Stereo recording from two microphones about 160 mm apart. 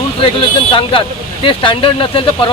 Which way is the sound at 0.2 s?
35° left (ahead or behind).